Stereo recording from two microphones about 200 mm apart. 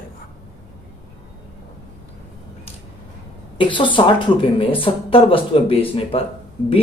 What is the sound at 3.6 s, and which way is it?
Speech, 25° left (ahead or behind).